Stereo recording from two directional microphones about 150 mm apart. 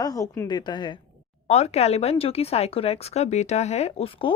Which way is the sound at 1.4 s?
45° left (ahead or behind).